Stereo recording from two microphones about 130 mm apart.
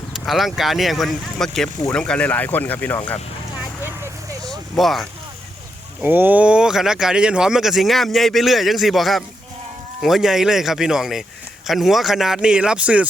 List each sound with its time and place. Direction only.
0.1 s speech: centre (ahead or behind); by 3.2 s 15° left (ahead or behind)
4.8 s speech: centre (ahead or behind)
6.0 s speech: 15° right (ahead or behind)